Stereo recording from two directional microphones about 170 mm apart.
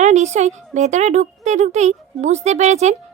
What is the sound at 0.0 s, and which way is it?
Speech, 45° right (ahead or behind).